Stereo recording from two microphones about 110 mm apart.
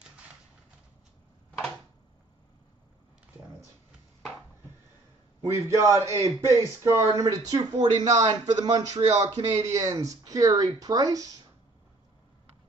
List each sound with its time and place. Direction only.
5.4 s a man's voice: 25° right (ahead or behind)